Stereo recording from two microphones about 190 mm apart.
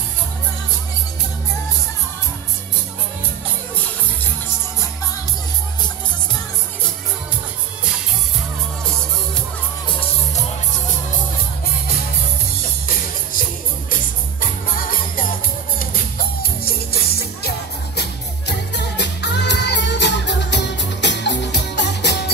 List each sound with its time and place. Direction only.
12.8 s music: 50° left (ahead or behind)
18.7 s music: 65° left (ahead or behind)